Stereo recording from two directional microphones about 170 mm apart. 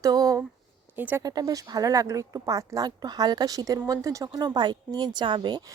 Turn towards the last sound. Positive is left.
turn(degrees=-25)  # may be behind; listen again after turning